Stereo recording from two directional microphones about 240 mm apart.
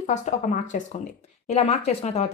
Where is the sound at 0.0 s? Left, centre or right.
Left.